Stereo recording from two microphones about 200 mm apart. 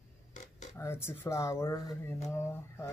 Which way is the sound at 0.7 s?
10° left (ahead or behind).